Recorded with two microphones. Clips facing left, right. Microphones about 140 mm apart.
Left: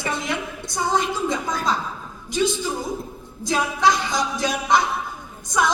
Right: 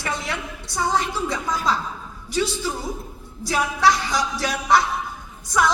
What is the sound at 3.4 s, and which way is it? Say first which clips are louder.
A woman's voice: even; 20° left (ahead or behind).